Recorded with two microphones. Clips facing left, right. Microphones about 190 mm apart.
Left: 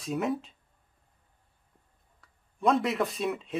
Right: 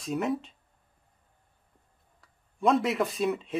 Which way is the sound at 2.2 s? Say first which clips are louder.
Right 1 dB; centre (ahead or behind).